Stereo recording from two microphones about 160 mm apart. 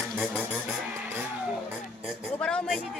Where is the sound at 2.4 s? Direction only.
5° left (ahead or behind).